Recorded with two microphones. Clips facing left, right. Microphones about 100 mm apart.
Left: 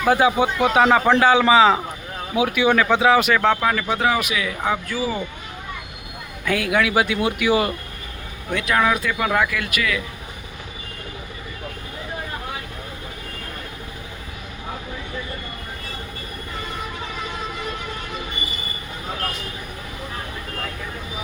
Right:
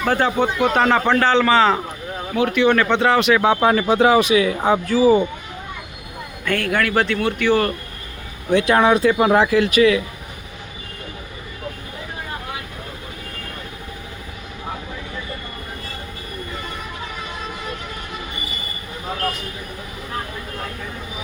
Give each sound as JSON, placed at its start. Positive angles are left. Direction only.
{"t": 0.0, "sound": "speech", "side_deg": 10}
{"t": 3.6, "sound": "speech", "side_deg": -30}
{"t": 6.4, "sound": "speech", "side_deg": 5}
{"t": 8.5, "sound": "speech", "side_deg": -30}